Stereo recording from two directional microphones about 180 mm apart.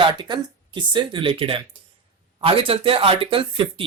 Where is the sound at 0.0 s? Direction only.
25° right (ahead or behind).